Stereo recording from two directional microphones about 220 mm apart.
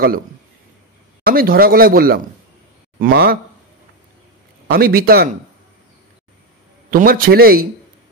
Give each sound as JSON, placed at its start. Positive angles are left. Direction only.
{"t": 1.2, "sound": "a man's voice", "side_deg": -40}
{"t": 4.6, "sound": "a man's voice", "side_deg": -45}
{"t": 6.9, "sound": "a man's voice", "side_deg": -40}